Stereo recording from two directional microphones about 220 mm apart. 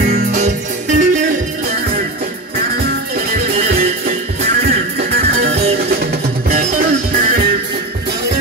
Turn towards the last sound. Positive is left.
turn(degrees=-40)  # may be behind; listen again after turning